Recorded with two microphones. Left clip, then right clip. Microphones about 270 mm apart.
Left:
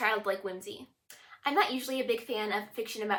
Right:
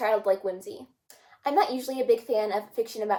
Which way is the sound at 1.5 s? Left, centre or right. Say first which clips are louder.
Right 4 dB; left.